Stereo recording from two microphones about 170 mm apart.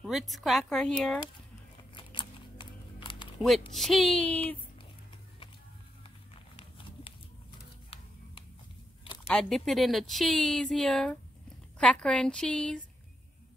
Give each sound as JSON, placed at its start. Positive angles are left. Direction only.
{"t": 0.0, "sound": "speech", "side_deg": 0}
{"t": 2.0, "sound": "a sound", "side_deg": 30}
{"t": 3.3, "sound": "speech", "side_deg": 0}
{"t": 7.9, "sound": "music", "side_deg": 35}
{"t": 9.0, "sound": "a sound", "side_deg": 30}
{"t": 9.3, "sound": "speech", "side_deg": 0}